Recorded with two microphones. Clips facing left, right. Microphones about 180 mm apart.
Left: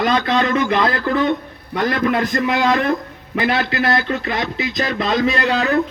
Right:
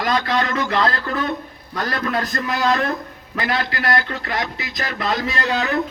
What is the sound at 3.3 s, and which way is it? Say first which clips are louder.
Speech: left 5 dB; 25° left (ahead or behind).